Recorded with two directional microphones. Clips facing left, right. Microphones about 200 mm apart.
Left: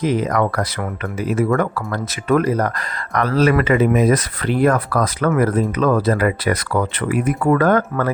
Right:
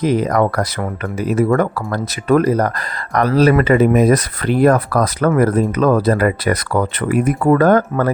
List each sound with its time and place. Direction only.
0.0 s speech: 40° right (ahead or behind)